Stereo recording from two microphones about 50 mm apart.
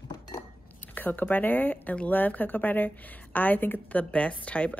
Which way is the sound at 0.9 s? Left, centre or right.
Left.